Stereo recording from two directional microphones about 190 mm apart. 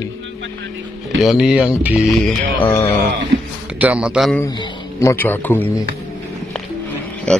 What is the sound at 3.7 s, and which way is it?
Speech, 5° right (ahead or behind).